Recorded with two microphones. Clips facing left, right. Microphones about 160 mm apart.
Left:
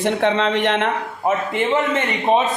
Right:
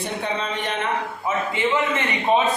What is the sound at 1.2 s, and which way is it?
Speech, 60° left (ahead or behind).